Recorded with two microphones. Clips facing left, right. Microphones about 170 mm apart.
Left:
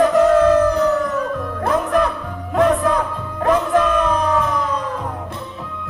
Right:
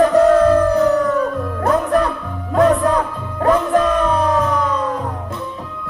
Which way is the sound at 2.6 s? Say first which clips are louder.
Right 2 dB; 35° right (ahead or behind).